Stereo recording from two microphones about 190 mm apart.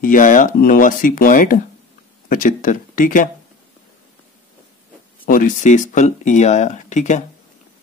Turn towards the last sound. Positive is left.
turn(degrees=40)  # may be behind; listen again after turning